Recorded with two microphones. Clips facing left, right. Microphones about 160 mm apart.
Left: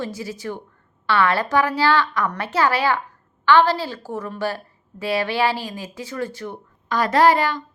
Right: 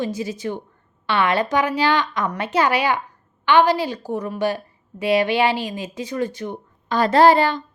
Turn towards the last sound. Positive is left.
turn(degrees=-25)  # may be behind; listen again after turning